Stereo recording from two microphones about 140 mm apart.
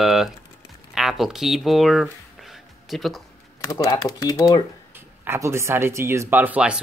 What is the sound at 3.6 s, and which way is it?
Speech, 25° left (ahead or behind).